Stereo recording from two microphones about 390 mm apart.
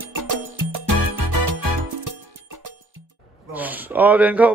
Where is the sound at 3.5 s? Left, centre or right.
Centre.